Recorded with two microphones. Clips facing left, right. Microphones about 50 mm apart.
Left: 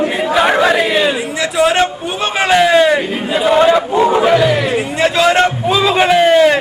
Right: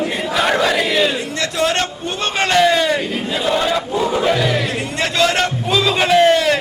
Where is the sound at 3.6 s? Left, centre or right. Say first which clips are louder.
Left 10 dB; left.